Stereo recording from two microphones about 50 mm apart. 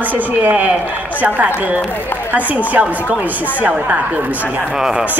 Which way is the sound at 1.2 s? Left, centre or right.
Right.